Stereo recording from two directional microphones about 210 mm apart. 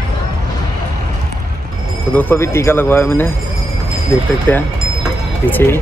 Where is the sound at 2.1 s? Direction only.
10° left (ahead or behind).